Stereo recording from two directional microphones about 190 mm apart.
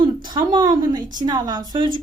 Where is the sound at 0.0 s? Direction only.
25° right (ahead or behind).